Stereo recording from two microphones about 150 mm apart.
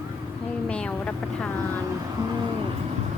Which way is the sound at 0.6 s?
10° left (ahead or behind).